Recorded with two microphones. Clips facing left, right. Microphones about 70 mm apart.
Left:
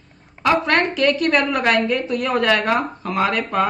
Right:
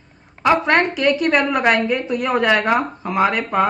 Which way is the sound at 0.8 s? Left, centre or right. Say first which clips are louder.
Right 1 dB; centre.